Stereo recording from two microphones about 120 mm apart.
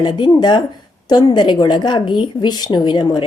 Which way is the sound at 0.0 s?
35° left (ahead or behind).